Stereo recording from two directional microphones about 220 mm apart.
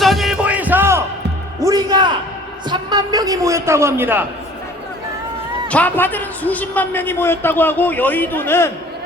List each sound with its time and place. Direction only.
0.0 s music: centre (ahead or behind); by 2.0 s 15° right (ahead or behind)
2.6 s a sound: 15° right (ahead or behind)
5.6 s a man's voice: 5° left (ahead or behind)